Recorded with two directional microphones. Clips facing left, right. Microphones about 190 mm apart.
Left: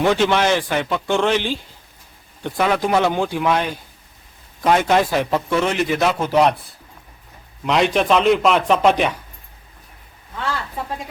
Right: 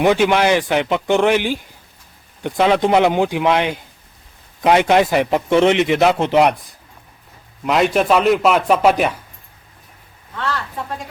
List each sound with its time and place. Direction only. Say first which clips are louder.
0.0 s speech: right 2 dB; 15° right (ahead or behind)
4.6 s speech: right 3 dB; 15° right (ahead or behind)
7.6 s a man's voice: right 2 dB; 5° right (ahead or behind)